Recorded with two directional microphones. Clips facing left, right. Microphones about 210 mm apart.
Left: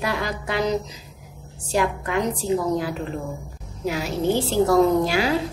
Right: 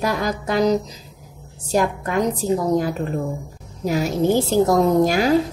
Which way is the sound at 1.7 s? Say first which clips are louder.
Right 3 dB; 40° right (ahead or behind).